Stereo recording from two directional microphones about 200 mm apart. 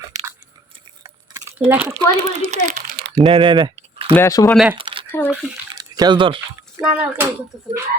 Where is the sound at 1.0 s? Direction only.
15° right (ahead or behind).